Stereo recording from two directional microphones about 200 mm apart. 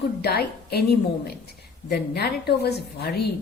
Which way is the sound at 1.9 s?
55° left (ahead or behind).